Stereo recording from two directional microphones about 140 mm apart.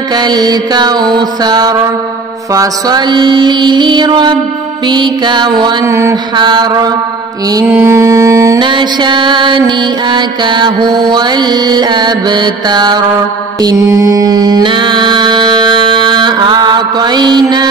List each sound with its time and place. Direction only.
0.1 s mantra: 30° right (ahead or behind)
5.9 s mantra: 20° right (ahead or behind)
6.3 s mantra: 30° right (ahead or behind)
7.5 s mantra: 20° right (ahead or behind)
8.5 s mantra: 35° right (ahead or behind)